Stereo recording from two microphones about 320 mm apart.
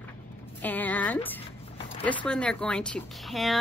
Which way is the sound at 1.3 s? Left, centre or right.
Centre.